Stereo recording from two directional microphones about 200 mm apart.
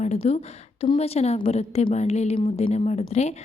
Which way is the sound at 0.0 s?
35° left (ahead or behind).